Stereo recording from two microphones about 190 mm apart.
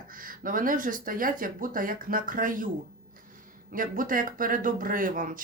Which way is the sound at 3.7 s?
45° right (ahead or behind).